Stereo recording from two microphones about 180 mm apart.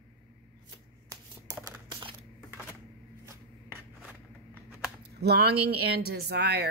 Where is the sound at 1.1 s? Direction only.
15° right (ahead or behind).